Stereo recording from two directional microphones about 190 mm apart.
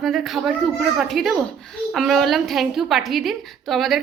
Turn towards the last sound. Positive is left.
turn(degrees=0)  # may be behind; listen again after turning